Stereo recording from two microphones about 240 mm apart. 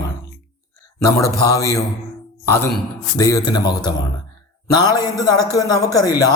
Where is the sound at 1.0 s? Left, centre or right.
Centre.